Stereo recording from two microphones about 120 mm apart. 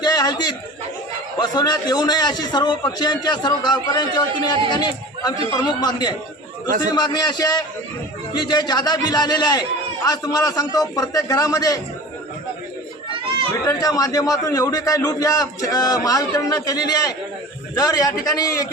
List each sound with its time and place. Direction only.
0.0 s a sound: 35° left (ahead or behind)
1.4 s a man's voice: 35° left (ahead or behind)
13.7 s a man's voice: 30° left (ahead or behind)